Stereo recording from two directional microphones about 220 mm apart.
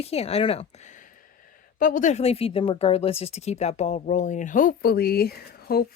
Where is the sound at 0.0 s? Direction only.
30° left (ahead or behind).